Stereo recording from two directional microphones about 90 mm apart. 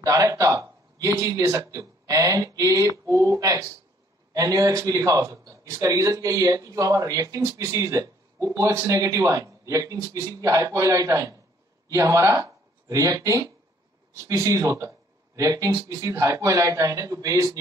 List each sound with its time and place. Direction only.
0.0 s a man's voice: 40° right (ahead or behind)